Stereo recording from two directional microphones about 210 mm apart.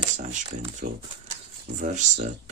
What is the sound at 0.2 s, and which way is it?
Speech, 35° right (ahead or behind).